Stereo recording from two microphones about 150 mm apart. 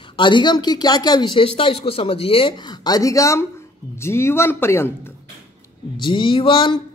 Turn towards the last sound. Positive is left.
turn(degrees=35)  # may be behind; listen again after turning